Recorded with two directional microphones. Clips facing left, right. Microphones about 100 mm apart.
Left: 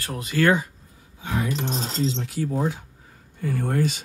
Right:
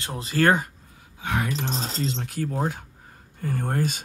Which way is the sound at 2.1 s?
50° right (ahead or behind).